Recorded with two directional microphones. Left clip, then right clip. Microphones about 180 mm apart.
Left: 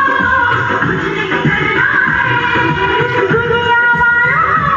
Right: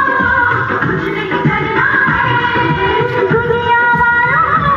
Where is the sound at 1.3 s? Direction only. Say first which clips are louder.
Left 1 dB; 50° left (ahead or behind).